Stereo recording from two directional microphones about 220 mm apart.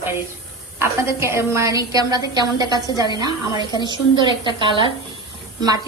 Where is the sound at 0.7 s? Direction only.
10° right (ahead or behind).